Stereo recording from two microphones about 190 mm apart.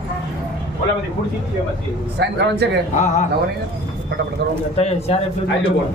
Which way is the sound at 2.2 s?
60° right (ahead or behind).